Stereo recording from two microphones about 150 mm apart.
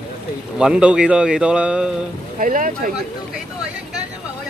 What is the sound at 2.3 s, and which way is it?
Speech, 65° right (ahead or behind).